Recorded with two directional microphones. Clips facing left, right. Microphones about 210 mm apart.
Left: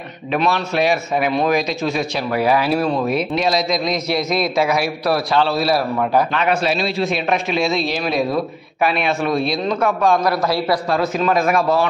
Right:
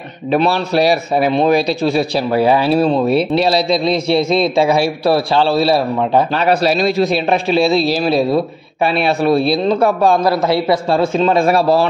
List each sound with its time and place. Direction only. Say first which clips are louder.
0.3 s a man's voice: right 5 dB; 35° right (ahead or behind)